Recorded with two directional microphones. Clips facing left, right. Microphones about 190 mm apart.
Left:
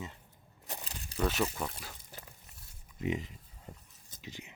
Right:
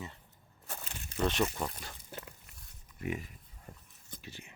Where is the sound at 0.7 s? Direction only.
15° left (ahead or behind).